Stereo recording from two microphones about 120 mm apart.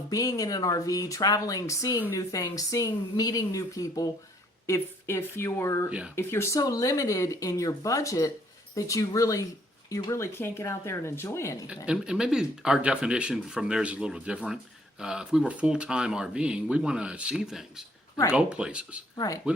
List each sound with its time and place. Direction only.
0.1 s speech: 30° left (ahead or behind)
11.9 s speech: 5° right (ahead or behind)
19.1 s speech: 30° left (ahead or behind)